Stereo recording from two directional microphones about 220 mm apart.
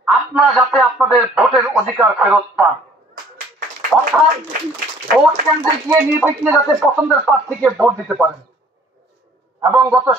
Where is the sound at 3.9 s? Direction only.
Centre (ahead or behind).